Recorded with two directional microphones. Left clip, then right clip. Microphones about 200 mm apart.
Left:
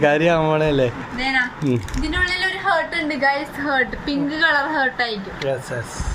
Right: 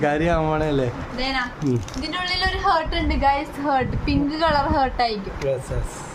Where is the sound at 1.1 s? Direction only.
15° right (ahead or behind).